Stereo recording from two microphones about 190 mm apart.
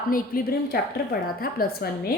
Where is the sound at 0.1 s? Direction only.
50° left (ahead or behind).